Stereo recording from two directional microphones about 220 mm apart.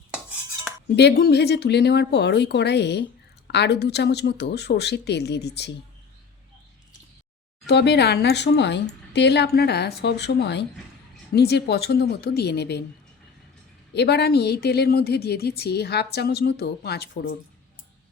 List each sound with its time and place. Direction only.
0.1 s cutlery: 5° right (ahead or behind)
0.9 s speech: 45° left (ahead or behind)
7.7 s speech: 50° left (ahead or behind)
13.9 s speech: 50° left (ahead or behind)